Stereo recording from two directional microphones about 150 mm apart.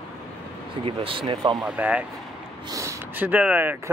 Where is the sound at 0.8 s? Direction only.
35° right (ahead or behind).